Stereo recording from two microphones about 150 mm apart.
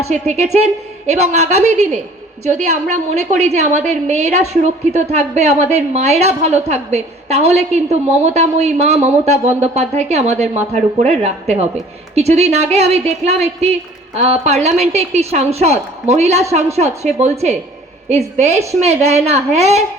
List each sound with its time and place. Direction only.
0.1 s a woman's voice: 50° right (ahead or behind)